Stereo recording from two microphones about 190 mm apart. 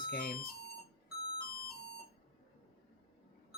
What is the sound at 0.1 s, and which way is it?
Speech, 50° left (ahead or behind).